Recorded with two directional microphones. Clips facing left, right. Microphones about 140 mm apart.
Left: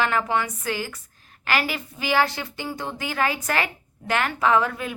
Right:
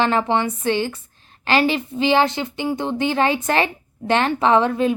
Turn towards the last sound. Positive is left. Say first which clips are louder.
# right 5 dB
turn(degrees=-25)  # may be behind; listen again after turning